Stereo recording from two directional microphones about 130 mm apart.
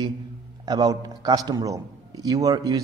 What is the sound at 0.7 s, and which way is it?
A man's voice, 30° right (ahead or behind).